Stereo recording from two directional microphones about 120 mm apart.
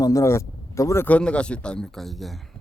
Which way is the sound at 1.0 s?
10° left (ahead or behind).